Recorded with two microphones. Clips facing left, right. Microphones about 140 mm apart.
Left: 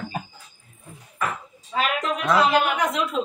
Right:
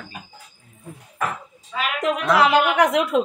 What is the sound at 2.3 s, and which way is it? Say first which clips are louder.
Speech: right 2 dB; 75° right (ahead or behind).